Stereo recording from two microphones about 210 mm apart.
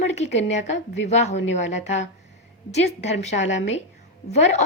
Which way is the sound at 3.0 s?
35° left (ahead or behind).